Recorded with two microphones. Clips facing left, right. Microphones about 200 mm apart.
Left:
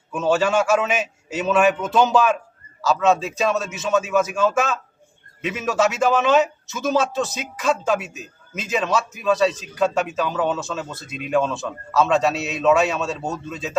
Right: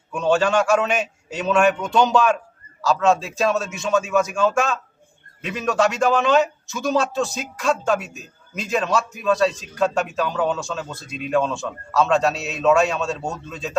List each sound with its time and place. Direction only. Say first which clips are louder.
0.1 s a man's voice: even; 5° left (ahead or behind)